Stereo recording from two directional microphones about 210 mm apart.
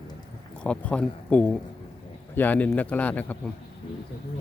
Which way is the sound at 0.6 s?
5° left (ahead or behind).